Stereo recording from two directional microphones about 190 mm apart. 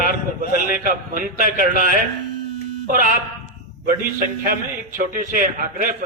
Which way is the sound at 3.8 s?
45° right (ahead or behind).